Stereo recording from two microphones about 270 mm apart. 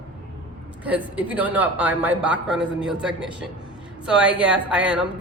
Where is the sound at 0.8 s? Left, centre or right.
Centre.